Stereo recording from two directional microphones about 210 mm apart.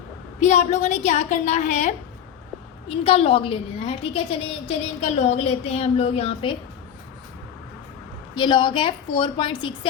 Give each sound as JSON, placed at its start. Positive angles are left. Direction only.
{"t": 0.3, "sound": "a woman's voice", "side_deg": 35}
{"t": 8.4, "sound": "a woman's voice", "side_deg": 20}